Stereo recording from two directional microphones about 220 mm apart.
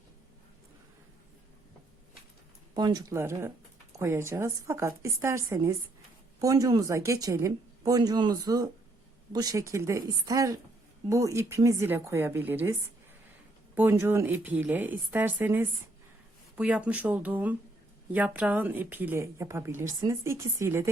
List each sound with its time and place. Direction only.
2.7 s speech: 20° right (ahead or behind)
13.7 s speech: 10° right (ahead or behind)